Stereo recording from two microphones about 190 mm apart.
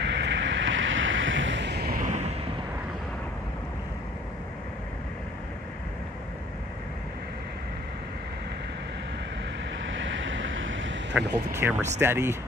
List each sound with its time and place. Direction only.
0.0 s boat: 70° right (ahead or behind); by 2.3 s 40° right (ahead or behind)
9.8 s vehicle: 80° right
11.6 s speech: 10° right (ahead or behind)